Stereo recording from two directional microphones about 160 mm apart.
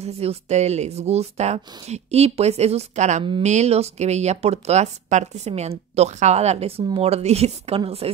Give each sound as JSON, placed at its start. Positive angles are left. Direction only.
{"t": 0.0, "sound": "speech", "side_deg": -40}